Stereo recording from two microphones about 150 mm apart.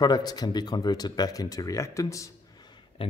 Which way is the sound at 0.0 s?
25° left (ahead or behind).